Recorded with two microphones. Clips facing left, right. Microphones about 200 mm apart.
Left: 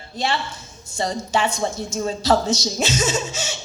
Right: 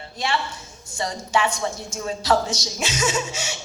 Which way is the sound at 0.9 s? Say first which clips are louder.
Left 2 dB; 30° left (ahead or behind).